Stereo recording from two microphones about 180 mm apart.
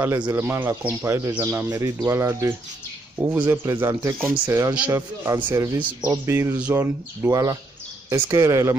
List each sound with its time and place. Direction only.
0.3 s speech: 15° right (ahead or behind)